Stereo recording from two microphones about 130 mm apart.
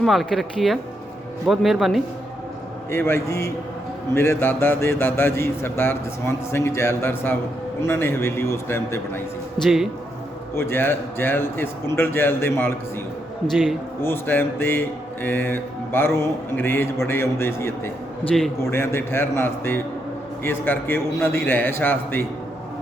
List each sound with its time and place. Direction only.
0.0 s speech: centre (ahead or behind)
2.9 s a man's voice: 20° left (ahead or behind)
9.6 s speech: 5° right (ahead or behind)
10.5 s mantra: 20° left (ahead or behind)
14.0 s mantra: 15° left (ahead or behind)
18.6 s a man's voice: 20° left (ahead or behind)
20.4 s mantra: 15° left (ahead or behind)